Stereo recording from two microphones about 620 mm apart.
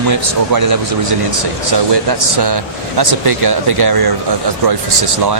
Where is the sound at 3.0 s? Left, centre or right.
Right.